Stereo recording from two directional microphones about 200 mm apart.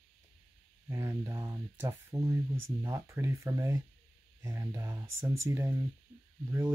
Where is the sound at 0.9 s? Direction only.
15° right (ahead or behind).